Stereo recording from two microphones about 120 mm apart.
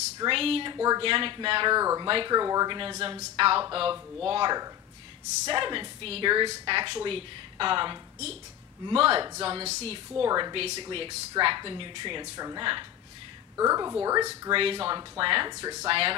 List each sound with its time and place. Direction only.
0.3 s speech: 50° right (ahead or behind)
0.7 s speech: 30° right (ahead or behind)
1.0 s speech: 45° right (ahead or behind)
1.8 s speech: 30° right (ahead or behind)
2.0 s speech: 40° right (ahead or behind)
3.0 s speech: 55° right (ahead or behind)
10.2 s speech: 35° right (ahead or behind)
10.5 s speech: 50° right (ahead or behind); by 14.5 s 30° right (ahead or behind)
14.5 s speech: 50° right (ahead or behind)
15.6 s speech: 25° right (ahead or behind)
15.9 s speech: 50° right (ahead or behind)